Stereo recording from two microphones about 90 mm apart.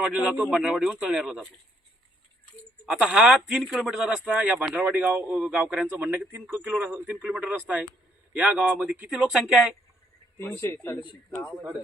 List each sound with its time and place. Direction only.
0.0 s speech: 15° right (ahead or behind)
2.8 s speech: 5° right (ahead or behind)
5.9 s a man's voice: 20° right (ahead or behind)
10.3 s speech: 25° left (ahead or behind)
11.5 s speech: 5° right (ahead or behind)